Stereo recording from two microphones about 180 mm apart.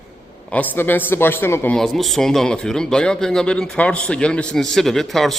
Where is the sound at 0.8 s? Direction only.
10° left (ahead or behind).